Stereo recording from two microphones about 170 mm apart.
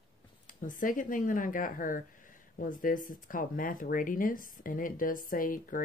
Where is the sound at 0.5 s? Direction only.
50° left (ahead or behind).